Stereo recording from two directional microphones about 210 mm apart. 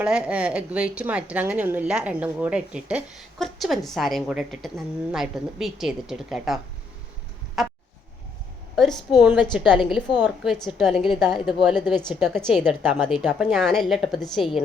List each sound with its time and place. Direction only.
0.0 s a woman's voice: 5° right (ahead or behind)
7.6 s a sound: centre (ahead or behind)
8.7 s a woman's voice: centre (ahead or behind)